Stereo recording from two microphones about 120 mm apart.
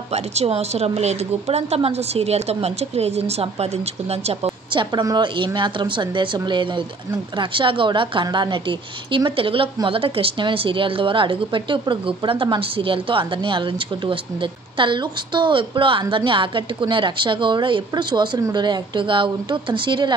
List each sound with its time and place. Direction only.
0.1 s speech: 60° right (ahead or behind)
5.0 s speech: 40° right (ahead or behind)